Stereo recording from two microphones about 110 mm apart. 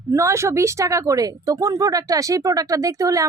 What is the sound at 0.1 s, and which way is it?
Speech, 25° right (ahead or behind).